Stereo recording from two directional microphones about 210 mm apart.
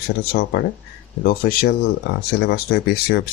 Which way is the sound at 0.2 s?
45° left (ahead or behind).